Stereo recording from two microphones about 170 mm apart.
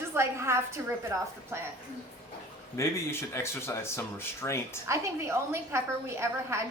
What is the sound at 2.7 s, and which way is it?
Speech, 15° left (ahead or behind).